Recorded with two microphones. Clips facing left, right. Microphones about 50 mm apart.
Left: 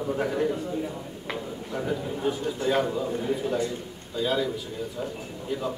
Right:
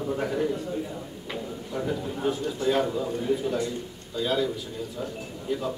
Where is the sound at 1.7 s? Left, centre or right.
Centre.